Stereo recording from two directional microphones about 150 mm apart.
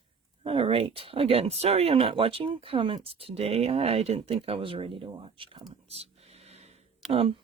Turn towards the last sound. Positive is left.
turn(degrees=-40)  # may be behind; listen again after turning